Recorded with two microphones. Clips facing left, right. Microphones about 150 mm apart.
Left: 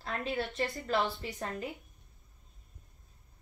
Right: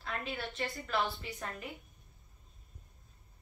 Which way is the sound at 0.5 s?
25° left (ahead or behind).